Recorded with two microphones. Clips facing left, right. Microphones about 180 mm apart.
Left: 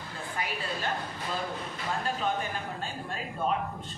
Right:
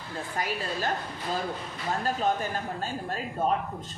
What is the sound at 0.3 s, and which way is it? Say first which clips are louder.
Speech: right 3 dB; 40° right (ahead or behind).